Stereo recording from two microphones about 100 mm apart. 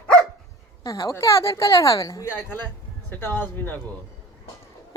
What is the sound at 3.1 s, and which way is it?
Speech, 15° left (ahead or behind).